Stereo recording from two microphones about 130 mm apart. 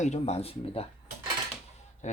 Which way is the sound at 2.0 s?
65° left (ahead or behind).